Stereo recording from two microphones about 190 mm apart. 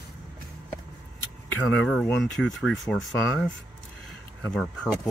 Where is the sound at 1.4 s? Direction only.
5° left (ahead or behind).